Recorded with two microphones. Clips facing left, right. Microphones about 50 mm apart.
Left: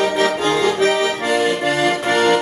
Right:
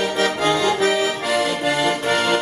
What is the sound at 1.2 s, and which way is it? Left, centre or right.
Accordion, left.